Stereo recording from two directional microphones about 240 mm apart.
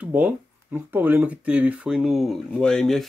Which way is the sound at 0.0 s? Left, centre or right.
Centre.